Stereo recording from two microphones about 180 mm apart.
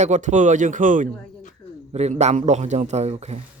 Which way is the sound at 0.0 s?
40° right (ahead or behind).